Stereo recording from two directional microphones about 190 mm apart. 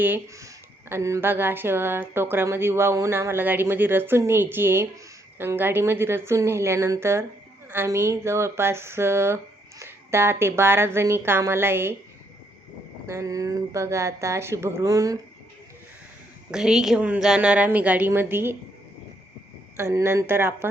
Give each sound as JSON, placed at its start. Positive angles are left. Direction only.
{"t": 0.0, "sound": "speech", "side_deg": -15}
{"t": 13.1, "sound": "speech", "side_deg": -15}
{"t": 16.5, "sound": "speech", "side_deg": -5}
{"t": 19.7, "sound": "speech", "side_deg": -15}